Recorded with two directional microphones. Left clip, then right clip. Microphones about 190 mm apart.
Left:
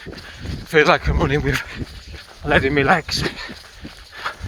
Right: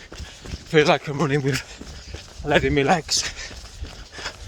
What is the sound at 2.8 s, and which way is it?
Speech, 20° right (ahead or behind).